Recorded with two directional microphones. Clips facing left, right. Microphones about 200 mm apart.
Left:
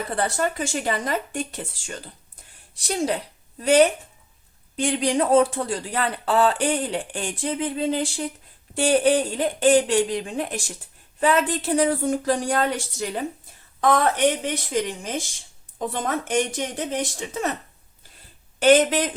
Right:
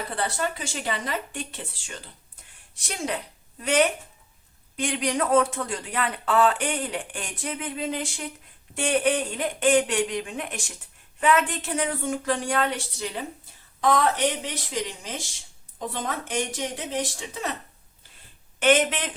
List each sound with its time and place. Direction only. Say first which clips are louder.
0.2 s speech: left 5 dB; 45° left (ahead or behind)
18.6 s speech: left 5 dB; 40° left (ahead or behind)